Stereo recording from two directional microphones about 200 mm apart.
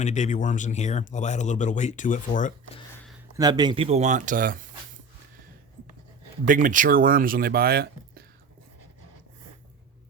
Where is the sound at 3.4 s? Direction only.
20° right (ahead or behind); by 4.7 s 45° right (ahead or behind).